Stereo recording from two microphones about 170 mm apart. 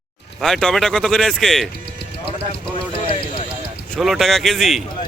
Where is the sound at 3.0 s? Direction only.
30° left (ahead or behind).